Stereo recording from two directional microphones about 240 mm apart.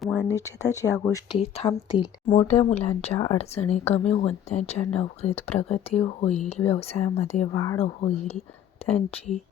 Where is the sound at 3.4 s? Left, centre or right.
Left.